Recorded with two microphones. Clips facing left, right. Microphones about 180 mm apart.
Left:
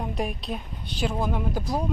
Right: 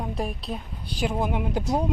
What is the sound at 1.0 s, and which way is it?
Speech, 15° right (ahead or behind).